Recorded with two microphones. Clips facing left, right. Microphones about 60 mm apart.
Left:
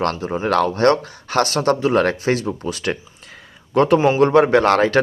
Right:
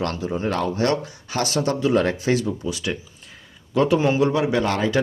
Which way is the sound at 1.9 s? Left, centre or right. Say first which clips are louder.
Left 3 dB; left.